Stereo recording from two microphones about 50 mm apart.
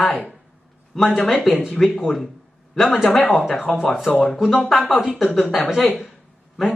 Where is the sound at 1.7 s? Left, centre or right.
Centre.